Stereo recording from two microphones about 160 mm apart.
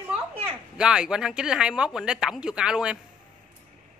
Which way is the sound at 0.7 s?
5° right (ahead or behind).